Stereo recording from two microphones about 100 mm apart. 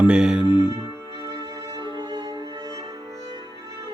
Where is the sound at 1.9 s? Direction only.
45° right (ahead or behind).